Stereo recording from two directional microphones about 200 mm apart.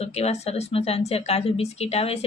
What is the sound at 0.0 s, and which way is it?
Speech, 30° left (ahead or behind).